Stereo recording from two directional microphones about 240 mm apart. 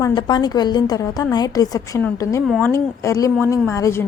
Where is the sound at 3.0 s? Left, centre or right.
Centre.